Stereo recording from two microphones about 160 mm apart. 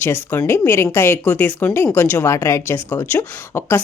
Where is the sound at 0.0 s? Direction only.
15° left (ahead or behind).